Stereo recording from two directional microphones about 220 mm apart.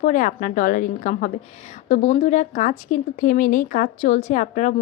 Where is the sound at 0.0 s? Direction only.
35° left (ahead or behind).